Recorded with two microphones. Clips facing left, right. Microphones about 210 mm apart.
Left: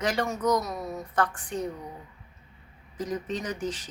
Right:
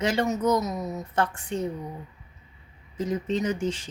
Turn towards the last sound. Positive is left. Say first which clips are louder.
# right 5 dB
turn(degrees=-25)  # may be behind; listen again after turning